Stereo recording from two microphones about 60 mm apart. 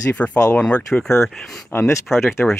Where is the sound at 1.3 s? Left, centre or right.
Centre.